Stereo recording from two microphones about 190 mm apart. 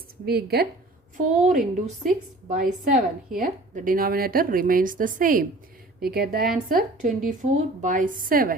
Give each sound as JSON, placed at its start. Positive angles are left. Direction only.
{"t": 0.3, "sound": "speech", "side_deg": -55}
{"t": 1.1, "sound": "a woman's voice", "side_deg": -40}